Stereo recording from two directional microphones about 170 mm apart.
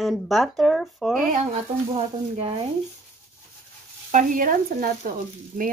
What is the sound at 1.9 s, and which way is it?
Speech, 35° right (ahead or behind).